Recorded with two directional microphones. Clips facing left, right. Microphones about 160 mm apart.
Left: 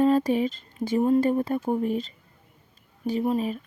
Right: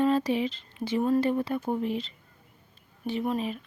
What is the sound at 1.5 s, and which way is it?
Speech, 40° left (ahead or behind).